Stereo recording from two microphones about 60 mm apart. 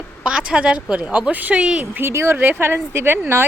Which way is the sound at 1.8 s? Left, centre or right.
Right.